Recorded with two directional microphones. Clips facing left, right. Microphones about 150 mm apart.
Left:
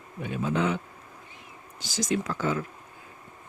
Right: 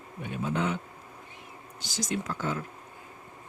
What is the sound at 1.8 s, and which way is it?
Speech, 90° left.